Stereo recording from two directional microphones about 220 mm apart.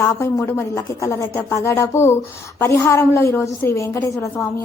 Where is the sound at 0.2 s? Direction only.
10° left (ahead or behind).